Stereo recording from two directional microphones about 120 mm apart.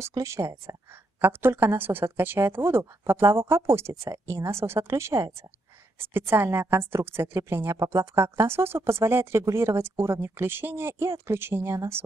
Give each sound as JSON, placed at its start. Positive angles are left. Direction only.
{"t": 0.0, "sound": "a woman's voice", "side_deg": -25}